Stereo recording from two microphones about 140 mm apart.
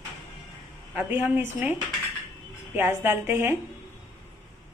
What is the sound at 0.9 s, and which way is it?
A woman's voice, 15° right (ahead or behind).